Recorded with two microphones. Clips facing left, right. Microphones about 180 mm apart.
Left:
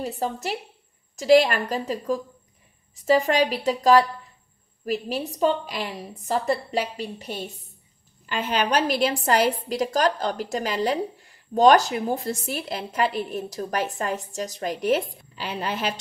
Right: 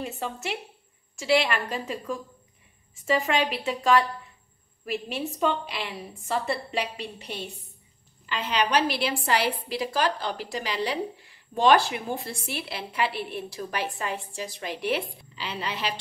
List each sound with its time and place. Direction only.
0.0 s a woman's voice: 35° left (ahead or behind)